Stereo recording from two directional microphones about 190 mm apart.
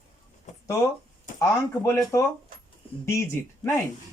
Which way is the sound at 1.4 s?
15° left (ahead or behind).